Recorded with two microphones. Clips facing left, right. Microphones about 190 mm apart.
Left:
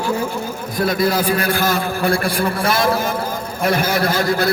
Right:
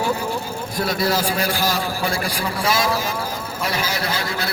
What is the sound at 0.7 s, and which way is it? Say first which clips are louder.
A man's voice: left 4 dB; 50° left (ahead or behind).